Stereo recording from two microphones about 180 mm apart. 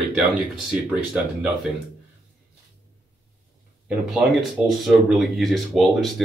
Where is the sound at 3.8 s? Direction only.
Centre (ahead or behind).